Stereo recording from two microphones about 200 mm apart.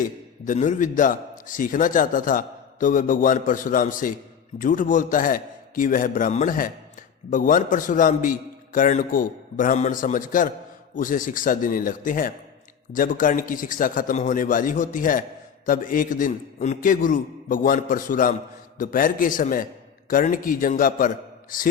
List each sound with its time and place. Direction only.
0.4 s a man's voice: 40° left (ahead or behind)